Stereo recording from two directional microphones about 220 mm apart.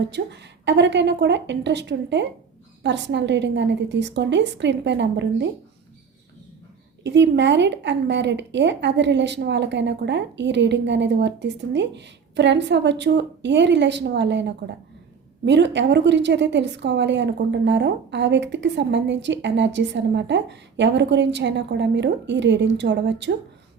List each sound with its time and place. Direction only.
0.1 s a woman's voice: 50° right (ahead or behind)
7.0 s a woman's voice: 50° right (ahead or behind)